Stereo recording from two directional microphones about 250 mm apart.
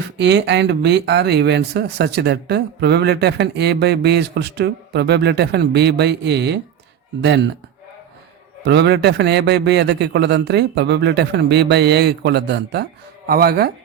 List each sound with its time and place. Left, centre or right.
0.2 s a man's voice: right
8.6 s a man's voice: right